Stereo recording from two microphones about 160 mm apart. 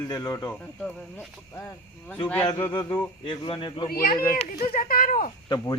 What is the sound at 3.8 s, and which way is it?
Speech, 65° left (ahead or behind).